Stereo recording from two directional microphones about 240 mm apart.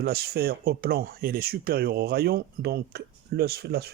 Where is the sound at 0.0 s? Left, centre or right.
Right.